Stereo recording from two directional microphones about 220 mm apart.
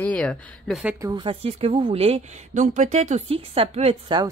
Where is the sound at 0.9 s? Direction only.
15° right (ahead or behind).